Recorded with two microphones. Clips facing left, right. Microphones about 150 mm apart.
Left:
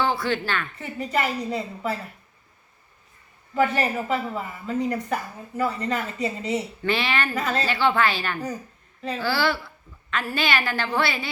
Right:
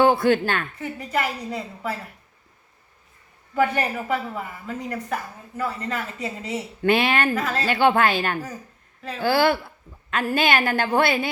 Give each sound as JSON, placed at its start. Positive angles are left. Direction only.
{"t": 0.0, "sound": "a woman's voice", "side_deg": -50}
{"t": 0.8, "sound": "a woman's voice", "side_deg": -5}
{"t": 3.5, "sound": "a woman's voice", "side_deg": -5}
{"t": 6.8, "sound": "a woman's voice", "side_deg": -50}
{"t": 7.3, "sound": "a woman's voice", "side_deg": -5}
{"t": 7.7, "sound": "a woman's voice", "side_deg": -50}